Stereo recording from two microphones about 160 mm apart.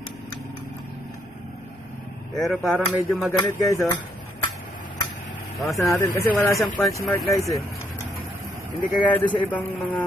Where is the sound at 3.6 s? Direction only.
20° left (ahead or behind).